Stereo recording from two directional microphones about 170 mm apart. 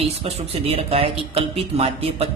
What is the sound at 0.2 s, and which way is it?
Speech, 35° right (ahead or behind).